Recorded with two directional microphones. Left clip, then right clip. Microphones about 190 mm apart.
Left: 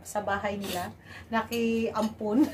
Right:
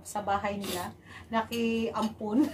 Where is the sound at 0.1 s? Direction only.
15° left (ahead or behind).